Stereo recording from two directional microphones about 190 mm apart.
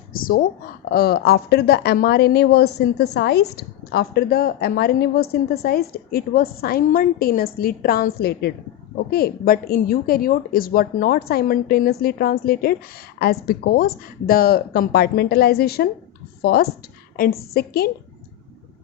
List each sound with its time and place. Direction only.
0.1 s speech: 50° left (ahead or behind)